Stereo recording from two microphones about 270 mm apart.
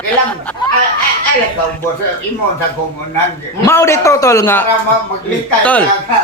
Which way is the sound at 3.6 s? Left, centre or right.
Centre.